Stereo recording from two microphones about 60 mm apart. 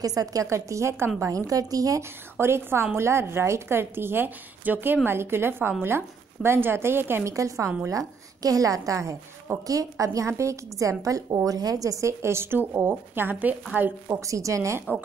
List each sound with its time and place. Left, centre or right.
0.0 s a woman's voice: right
0.5 s a woman's voice: right
1.5 s a woman's voice: right
2.0 s a woman's voice: right
7.2 s a woman's voice: right
8.4 s a woman's voice: right
14.2 s a woman's voice: right